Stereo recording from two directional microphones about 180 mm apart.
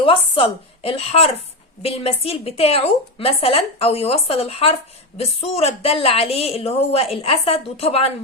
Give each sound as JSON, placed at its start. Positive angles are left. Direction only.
{"t": 0.0, "sound": "a woman's voice", "side_deg": 30}